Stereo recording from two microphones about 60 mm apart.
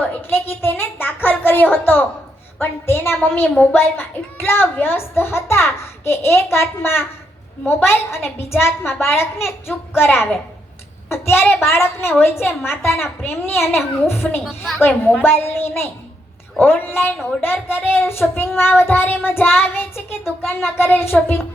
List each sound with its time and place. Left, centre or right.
0.2 s a woman's voice: left
14.4 s a woman's voice: centre
15.1 s speech: left